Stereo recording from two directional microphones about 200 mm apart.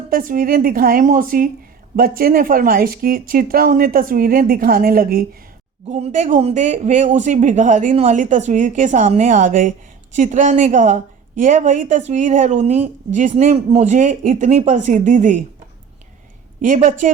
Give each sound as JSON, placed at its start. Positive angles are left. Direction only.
{"t": 0.1, "sound": "speech", "side_deg": -45}
{"t": 16.6, "sound": "speech", "side_deg": -40}